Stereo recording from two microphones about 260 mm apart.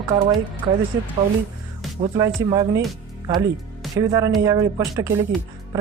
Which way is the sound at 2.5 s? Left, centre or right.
Centre.